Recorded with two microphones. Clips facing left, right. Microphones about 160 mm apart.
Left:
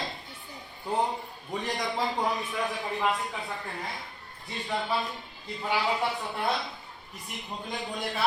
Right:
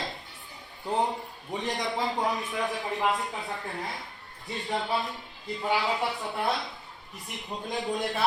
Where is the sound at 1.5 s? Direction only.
20° right (ahead or behind).